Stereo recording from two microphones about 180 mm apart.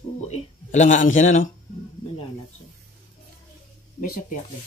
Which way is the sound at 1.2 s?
45° left (ahead or behind).